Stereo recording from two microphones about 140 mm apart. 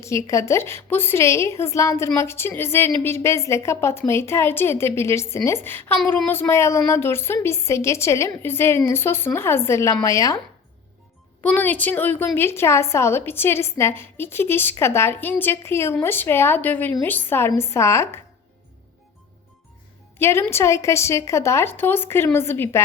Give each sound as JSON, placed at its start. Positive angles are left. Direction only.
{"t": 0.0, "sound": "a woman's voice", "side_deg": 20}
{"t": 11.4, "sound": "a woman's voice", "side_deg": 10}
{"t": 20.1, "sound": "a woman's voice", "side_deg": 15}